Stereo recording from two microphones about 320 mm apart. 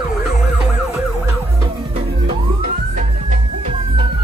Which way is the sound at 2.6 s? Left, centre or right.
Right.